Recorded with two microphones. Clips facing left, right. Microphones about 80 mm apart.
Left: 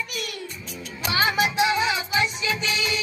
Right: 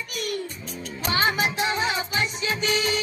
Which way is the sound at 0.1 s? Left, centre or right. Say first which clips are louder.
Right 3 dB; right.